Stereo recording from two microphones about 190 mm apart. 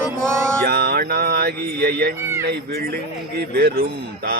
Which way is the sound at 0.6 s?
55° right (ahead or behind).